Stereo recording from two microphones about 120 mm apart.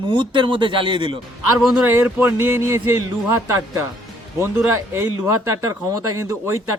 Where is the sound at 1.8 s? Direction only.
20° right (ahead or behind).